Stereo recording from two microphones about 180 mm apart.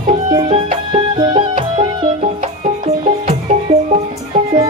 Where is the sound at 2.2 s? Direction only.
40° right (ahead or behind).